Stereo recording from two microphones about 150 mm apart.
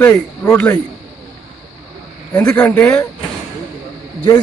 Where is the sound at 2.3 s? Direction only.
10° left (ahead or behind).